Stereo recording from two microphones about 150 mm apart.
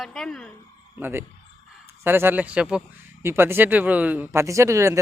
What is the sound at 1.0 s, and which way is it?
Speech, 15° right (ahead or behind).